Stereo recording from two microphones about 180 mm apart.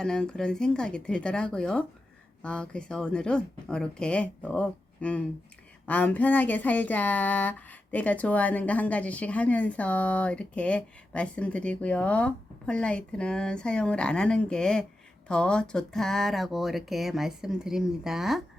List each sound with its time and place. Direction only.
0.0 s speech: 5° left (ahead or behind)